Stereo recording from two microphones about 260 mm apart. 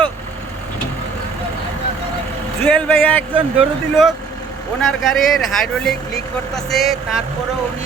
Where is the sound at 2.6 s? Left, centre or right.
Centre.